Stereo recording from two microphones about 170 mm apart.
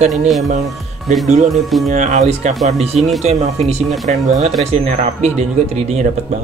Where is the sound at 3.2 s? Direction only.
40° right (ahead or behind).